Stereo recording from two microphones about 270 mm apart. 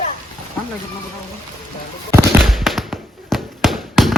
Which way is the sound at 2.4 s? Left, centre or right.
Centre.